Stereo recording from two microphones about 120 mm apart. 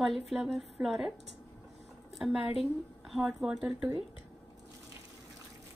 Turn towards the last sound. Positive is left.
turn(degrees=-5)  # may be behind; listen again after turning